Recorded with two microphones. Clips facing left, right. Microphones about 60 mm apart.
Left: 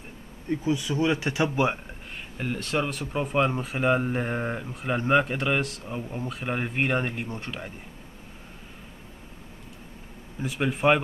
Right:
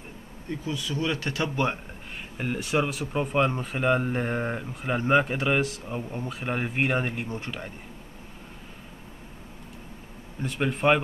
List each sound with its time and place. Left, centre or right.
0.5 s speech: centre
2.3 s speech: centre
10.4 s speech: centre